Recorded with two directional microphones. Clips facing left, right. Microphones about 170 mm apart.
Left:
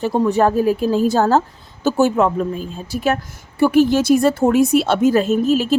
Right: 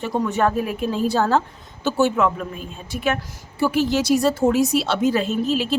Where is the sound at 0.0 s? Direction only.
35° left (ahead or behind).